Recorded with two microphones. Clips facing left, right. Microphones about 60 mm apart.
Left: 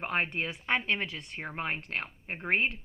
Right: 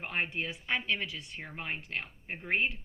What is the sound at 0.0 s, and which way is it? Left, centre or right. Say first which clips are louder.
Speech: left 3 dB; left.